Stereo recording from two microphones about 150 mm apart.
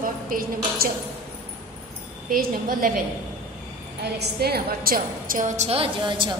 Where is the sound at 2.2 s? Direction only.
70° right (ahead or behind).